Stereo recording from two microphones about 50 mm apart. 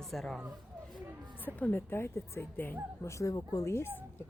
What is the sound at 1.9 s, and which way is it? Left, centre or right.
Speech, left.